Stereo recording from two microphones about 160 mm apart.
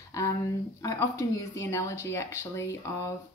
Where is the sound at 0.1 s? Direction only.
20° left (ahead or behind).